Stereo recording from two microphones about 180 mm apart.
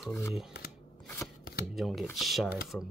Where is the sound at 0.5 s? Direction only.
65° left (ahead or behind).